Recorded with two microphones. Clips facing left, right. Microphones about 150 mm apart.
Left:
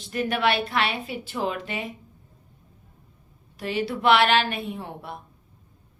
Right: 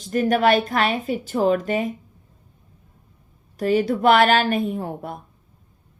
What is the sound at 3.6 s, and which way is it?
A woman's voice, 45° right (ahead or behind).